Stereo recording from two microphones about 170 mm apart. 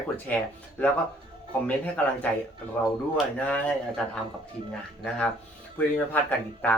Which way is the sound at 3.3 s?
10° left (ahead or behind).